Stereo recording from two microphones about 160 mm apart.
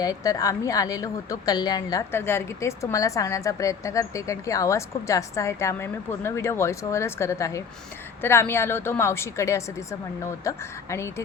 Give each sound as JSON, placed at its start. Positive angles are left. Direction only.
{"t": 0.0, "sound": "a woman's voice", "side_deg": 20}